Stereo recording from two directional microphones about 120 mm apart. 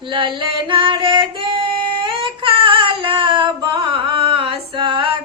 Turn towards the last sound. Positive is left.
turn(degrees=-45)  # may be behind; listen again after turning